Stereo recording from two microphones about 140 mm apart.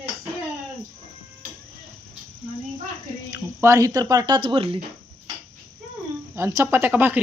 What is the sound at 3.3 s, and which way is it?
Speech, 20° right (ahead or behind).